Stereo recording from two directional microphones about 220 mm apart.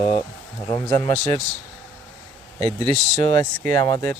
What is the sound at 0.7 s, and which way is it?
Speech, 20° left (ahead or behind).